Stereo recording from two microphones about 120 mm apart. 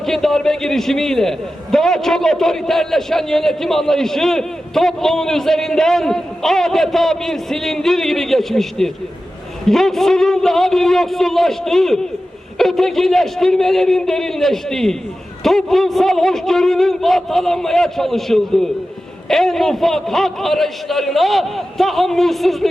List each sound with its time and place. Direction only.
0.0 s a man's voice: 5° left (ahead or behind)